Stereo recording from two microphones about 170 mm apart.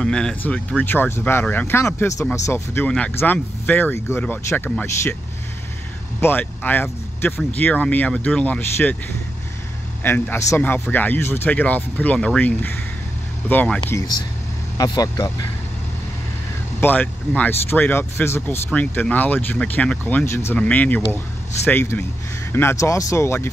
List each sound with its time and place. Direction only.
0.0 s speech: 5° left (ahead or behind)
6.2 s speech: 10° left (ahead or behind)
10.0 s speech: 10° left (ahead or behind)
16.8 s speech: 10° left (ahead or behind)